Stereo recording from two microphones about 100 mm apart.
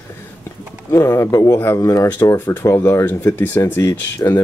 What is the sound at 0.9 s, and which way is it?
Speech, 30° left (ahead or behind).